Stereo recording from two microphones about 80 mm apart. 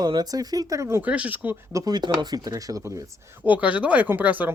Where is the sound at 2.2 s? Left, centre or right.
Right.